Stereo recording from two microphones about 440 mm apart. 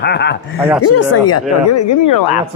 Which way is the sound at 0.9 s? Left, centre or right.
Left.